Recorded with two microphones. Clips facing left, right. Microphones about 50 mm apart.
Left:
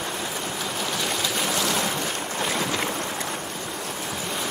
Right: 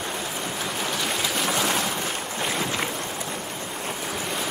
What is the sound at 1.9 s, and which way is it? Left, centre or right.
Boat, centre.